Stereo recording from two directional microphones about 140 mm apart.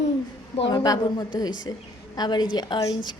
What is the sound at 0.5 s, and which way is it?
A woman's voice, 35° left (ahead or behind).